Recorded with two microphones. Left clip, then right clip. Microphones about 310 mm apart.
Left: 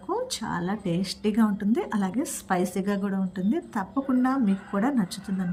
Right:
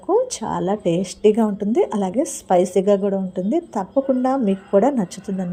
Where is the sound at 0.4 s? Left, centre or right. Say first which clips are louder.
Right 7 dB; right.